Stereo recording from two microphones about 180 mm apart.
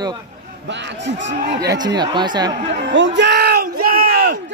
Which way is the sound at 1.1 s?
90° right.